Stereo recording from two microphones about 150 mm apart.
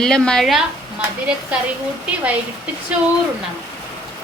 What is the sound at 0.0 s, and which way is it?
Speech, 5° left (ahead or behind).